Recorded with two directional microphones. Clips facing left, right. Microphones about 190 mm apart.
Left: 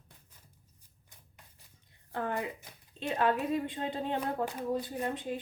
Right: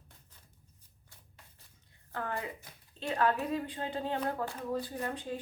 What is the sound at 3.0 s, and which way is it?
Speech, 20° left (ahead or behind).